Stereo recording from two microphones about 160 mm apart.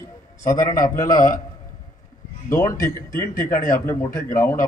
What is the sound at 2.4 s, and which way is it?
A man's voice, 20° left (ahead or behind).